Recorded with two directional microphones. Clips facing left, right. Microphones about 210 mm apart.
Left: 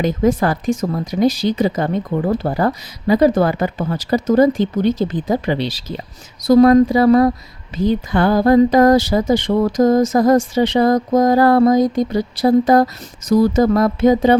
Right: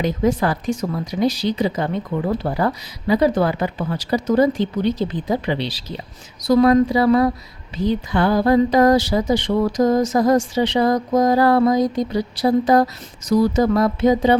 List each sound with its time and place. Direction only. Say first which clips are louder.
0.0 s speech: left 3 dB; 50° left (ahead or behind)